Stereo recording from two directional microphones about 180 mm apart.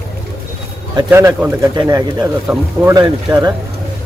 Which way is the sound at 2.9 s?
20° right (ahead or behind).